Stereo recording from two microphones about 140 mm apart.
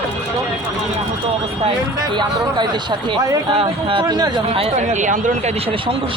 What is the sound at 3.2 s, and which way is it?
Speech, 30° right (ahead or behind).